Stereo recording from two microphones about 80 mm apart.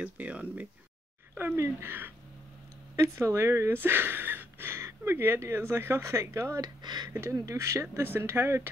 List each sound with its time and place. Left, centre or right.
0.0 s speech: centre
1.3 s speech: right
6.6 s speech: right
7.1 s speech: right